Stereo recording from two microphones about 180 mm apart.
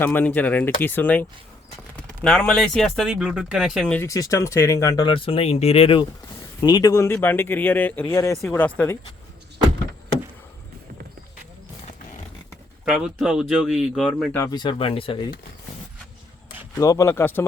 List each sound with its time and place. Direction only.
0.0 s speech: 10° left (ahead or behind)
2.2 s speech: centre (ahead or behind)
4.0 s speech: 20° left (ahead or behind)
5.0 s speech: 30° left (ahead or behind); by 9.0 s 10° left (ahead or behind)
12.9 s speech: 5° right (ahead or behind)
14.3 s speech: 20° left (ahead or behind)
16.8 s speech: 15° left (ahead or behind)